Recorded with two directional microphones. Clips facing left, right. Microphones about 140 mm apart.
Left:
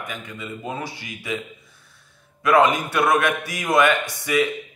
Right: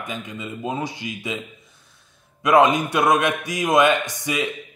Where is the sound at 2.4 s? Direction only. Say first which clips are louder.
Right 1 dB; 20° right (ahead or behind).